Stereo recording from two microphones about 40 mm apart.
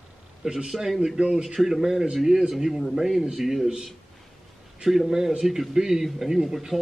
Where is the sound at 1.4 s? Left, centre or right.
Centre.